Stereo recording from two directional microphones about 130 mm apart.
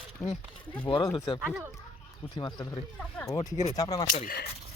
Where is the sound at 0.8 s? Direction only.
40° left (ahead or behind).